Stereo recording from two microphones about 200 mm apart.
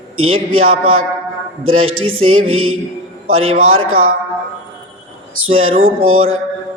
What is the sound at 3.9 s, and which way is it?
Speech, 90° right.